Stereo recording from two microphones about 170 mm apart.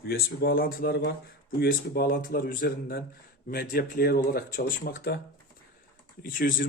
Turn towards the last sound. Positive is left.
turn(degrees=50)  # may be behind; listen again after turning